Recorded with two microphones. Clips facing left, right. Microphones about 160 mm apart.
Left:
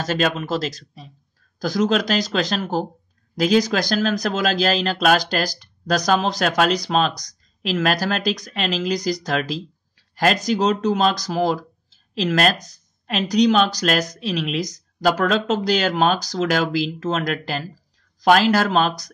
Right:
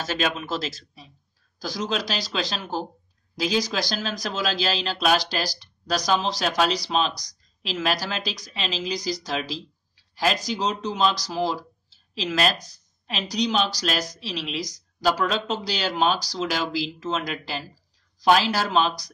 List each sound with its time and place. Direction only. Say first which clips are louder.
0.0 s speech: left 5 dB; 40° left (ahead or behind)